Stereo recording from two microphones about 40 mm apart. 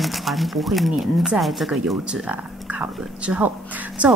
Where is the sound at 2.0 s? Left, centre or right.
Right.